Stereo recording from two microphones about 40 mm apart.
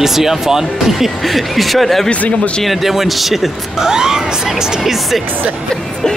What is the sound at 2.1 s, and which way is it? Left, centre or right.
Speech, left.